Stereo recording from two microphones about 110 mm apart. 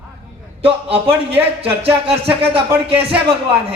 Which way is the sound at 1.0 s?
55° right (ahead or behind).